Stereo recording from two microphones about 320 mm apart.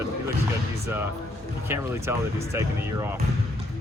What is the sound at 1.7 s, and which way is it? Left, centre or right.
A man's voice, centre.